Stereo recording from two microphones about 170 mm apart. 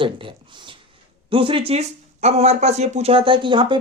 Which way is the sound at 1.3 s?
30° right (ahead or behind).